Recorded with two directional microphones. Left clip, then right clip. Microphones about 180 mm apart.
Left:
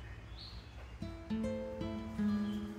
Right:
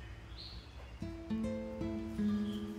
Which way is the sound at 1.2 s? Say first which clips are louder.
Left 1 dB; centre (ahead or behind).